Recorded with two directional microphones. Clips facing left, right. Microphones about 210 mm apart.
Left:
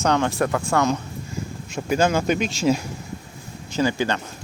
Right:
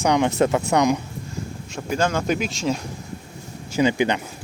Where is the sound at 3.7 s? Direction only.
15° right (ahead or behind).